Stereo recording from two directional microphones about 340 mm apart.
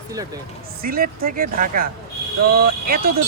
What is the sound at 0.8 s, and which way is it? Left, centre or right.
Speech, right.